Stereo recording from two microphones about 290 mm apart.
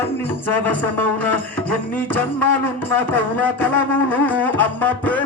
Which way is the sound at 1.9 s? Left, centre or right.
Centre.